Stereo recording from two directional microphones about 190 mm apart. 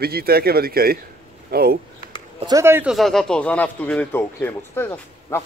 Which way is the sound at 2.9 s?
Centre (ahead or behind).